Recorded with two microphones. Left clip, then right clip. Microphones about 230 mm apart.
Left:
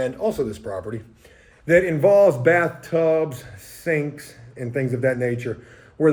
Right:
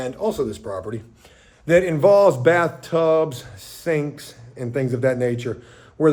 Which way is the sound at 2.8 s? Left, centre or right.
Centre.